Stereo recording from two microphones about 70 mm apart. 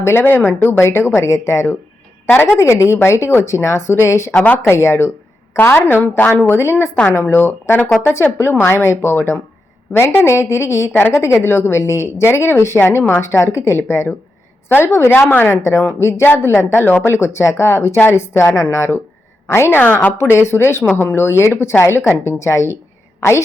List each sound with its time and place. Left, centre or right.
0.0 s a woman's voice: left
2.2 s a woman's voice: left
2.6 s speech: left
4.4 s a woman's voice: left
4.7 s a woman's voice: left
9.9 s a woman's voice: left
10.2 s a woman's voice: left
15.3 s a woman's voice: left
15.6 s a woman's voice: left
20.1 s a woman's voice: left